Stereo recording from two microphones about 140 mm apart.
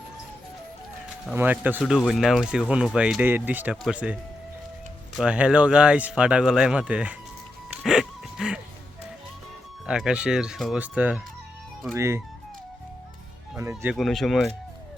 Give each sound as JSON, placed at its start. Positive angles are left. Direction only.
{"t": 1.3, "sound": "speech", "side_deg": -10}
{"t": 1.8, "sound": "speech", "side_deg": 5}
{"t": 7.9, "sound": "music", "side_deg": -5}
{"t": 9.8, "sound": "speech", "side_deg": -5}
{"t": 13.6, "sound": "speech", "side_deg": -20}
{"t": 13.9, "sound": "speech", "side_deg": 0}